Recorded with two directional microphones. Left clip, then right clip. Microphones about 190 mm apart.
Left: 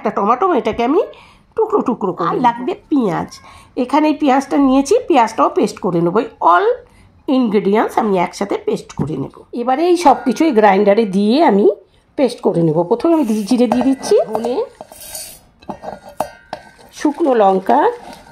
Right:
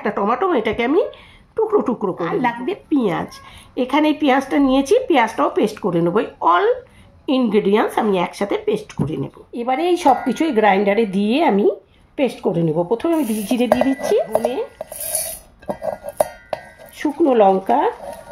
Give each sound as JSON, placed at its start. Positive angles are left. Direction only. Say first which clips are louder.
{"t": 0.0, "sound": "speech", "louder": "left 4 dB", "side_deg": 30}
{"t": 3.9, "sound": "a woman's voice", "louder": "left 3 dB", "side_deg": 90}
{"t": 4.3, "sound": "speech", "louder": "left 3 dB", "side_deg": 25}
{"t": 16.9, "sound": "speech", "louder": "left 2 dB", "side_deg": 35}